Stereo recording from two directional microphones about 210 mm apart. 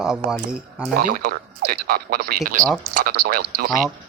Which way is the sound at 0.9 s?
45° right (ahead or behind).